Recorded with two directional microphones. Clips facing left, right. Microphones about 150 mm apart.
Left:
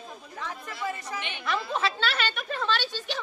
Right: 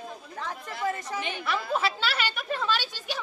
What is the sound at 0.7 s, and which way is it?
Speech, 50° right (ahead or behind).